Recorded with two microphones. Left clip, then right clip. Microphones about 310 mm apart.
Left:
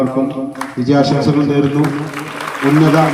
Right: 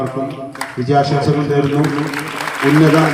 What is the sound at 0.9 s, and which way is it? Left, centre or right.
Speech, left.